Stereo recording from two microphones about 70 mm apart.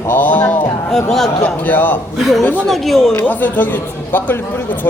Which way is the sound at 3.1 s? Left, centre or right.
Left.